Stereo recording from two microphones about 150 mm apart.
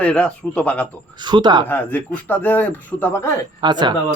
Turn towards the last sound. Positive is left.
turn(degrees=-30)  # may be behind; listen again after turning